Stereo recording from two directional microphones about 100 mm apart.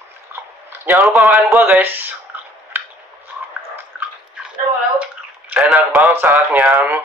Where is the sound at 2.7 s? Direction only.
20° right (ahead or behind).